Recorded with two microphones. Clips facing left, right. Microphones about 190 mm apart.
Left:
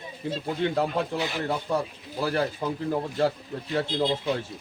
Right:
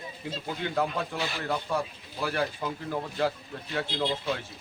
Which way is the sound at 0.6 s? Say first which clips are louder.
Left 3 dB; 30° left (ahead or behind).